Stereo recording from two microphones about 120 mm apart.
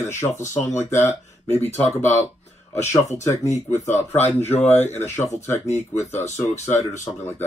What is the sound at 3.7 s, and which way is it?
Speech, 20° left (ahead or behind).